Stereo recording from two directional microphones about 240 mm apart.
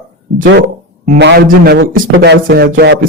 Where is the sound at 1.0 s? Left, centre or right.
Right.